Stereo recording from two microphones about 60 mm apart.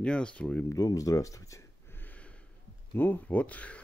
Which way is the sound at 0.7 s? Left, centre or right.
Left.